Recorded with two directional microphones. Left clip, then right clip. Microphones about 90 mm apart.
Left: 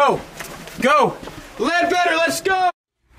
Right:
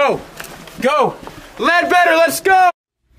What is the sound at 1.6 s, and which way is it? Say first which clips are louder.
A man's voice: right 5 dB; 25° right (ahead or behind).